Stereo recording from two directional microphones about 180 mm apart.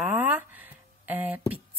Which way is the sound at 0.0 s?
10° right (ahead or behind).